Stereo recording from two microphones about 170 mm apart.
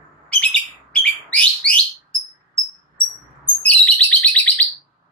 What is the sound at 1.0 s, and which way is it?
Bird, 5° left (ahead or behind).